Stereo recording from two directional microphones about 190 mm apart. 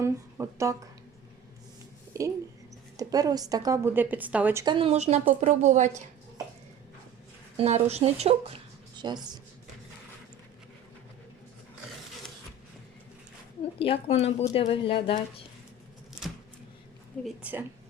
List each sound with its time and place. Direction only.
0.0 s speech: 15° right (ahead or behind)
2.1 s a woman's voice: 15° right (ahead or behind)
4.6 s speech: 25° right (ahead or behind)
7.5 s speech: 35° right (ahead or behind)
9.0 s speech: 25° right (ahead or behind)
13.7 s speech: 30° left (ahead or behind)
17.2 s a woman's voice: 10° right (ahead or behind)